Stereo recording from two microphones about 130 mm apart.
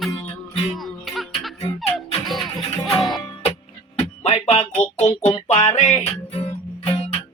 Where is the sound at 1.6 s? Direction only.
50° left (ahead or behind).